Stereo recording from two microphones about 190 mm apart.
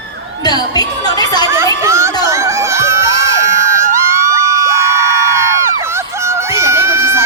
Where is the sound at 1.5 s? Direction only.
15° right (ahead or behind).